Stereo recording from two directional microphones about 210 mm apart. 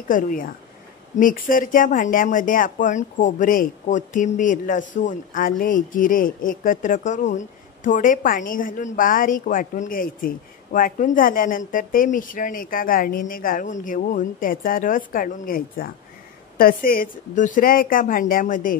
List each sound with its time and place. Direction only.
0.1 s speech: 40° left (ahead or behind)